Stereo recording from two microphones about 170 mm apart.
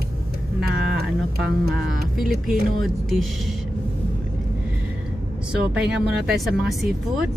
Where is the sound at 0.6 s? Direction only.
70° right (ahead or behind).